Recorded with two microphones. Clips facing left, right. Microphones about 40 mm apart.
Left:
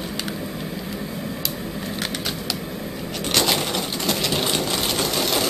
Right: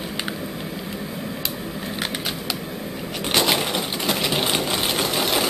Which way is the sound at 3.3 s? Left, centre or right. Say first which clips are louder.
Right 1 dB; centre.